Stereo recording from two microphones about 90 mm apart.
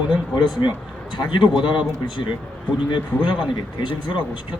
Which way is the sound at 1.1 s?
60° left (ahead or behind).